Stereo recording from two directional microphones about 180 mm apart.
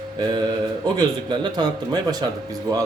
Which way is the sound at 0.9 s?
25° right (ahead or behind).